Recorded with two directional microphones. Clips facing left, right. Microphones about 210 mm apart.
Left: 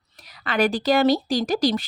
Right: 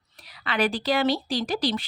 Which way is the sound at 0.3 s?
45° left (ahead or behind).